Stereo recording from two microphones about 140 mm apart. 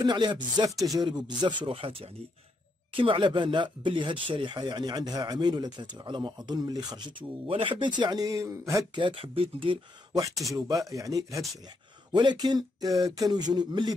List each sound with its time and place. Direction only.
0.0 s speech: 30° right (ahead or behind)
0.7 s speech: centre (ahead or behind)
0.9 s speech: 30° right (ahead or behind)
9.0 s speech: 40° right (ahead or behind)
10.8 s a sound: 25° right (ahead or behind)